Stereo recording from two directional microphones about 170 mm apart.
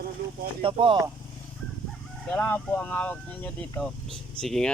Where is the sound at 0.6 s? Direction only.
30° right (ahead or behind).